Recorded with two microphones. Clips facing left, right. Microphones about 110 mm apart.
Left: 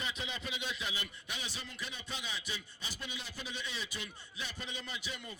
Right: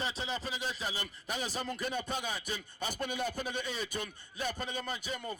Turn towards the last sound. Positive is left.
turn(degrees=-45)  # may be behind; listen again after turning